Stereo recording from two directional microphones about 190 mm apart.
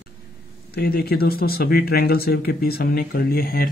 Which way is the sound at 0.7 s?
55° left (ahead or behind).